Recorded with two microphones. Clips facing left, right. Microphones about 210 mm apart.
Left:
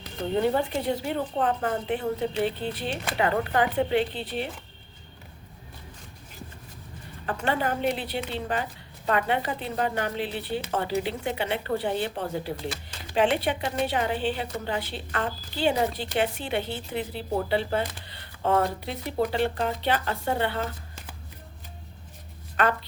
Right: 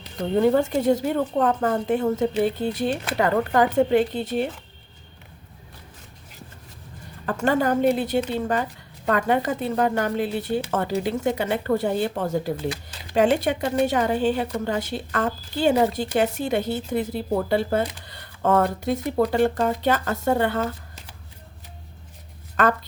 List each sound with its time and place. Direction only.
0.4 s a woman's voice: 45° right (ahead or behind)
7.3 s a woman's voice: 45° right (ahead or behind)
22.6 s a woman's voice: 45° right (ahead or behind)